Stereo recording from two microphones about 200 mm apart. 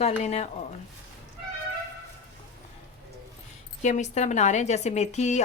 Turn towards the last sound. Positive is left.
turn(degrees=35)  # may be behind; listen again after turning